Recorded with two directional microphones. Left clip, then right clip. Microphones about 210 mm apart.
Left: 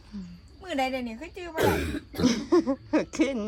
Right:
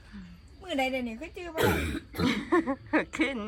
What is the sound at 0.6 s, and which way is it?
Speech, centre (ahead or behind).